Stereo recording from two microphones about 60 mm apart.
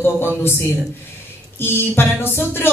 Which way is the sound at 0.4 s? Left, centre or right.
Left.